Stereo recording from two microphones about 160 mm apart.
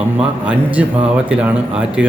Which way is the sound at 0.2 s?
10° right (ahead or behind).